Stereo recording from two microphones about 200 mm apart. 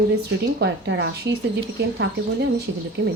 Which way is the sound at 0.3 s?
55° right (ahead or behind).